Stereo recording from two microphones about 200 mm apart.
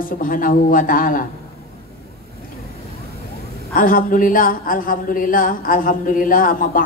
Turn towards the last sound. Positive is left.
turn(degrees=45)  # may be behind; listen again after turning